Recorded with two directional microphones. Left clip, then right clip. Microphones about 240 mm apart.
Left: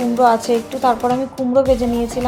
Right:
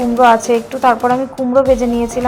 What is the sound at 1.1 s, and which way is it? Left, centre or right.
Speech, centre.